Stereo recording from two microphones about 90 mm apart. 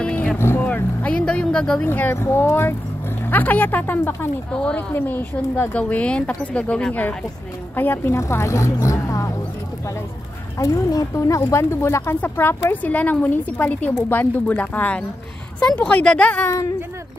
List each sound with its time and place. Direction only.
0.0 s vehicle: 15° left (ahead or behind)
0.4 s vehicle: 25° left (ahead or behind)
0.7 s vehicle: 15° left (ahead or behind)
1.9 s speech: 20° left (ahead or behind)
4.5 s speech: 10° left (ahead or behind); by 9.3 s 40° left (ahead or behind)
10.6 s speech: 40° left (ahead or behind); by 16.4 s 15° left (ahead or behind)